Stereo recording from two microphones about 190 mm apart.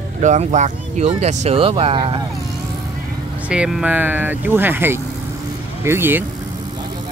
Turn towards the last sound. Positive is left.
turn(degrees=-10)  # may be behind; listen again after turning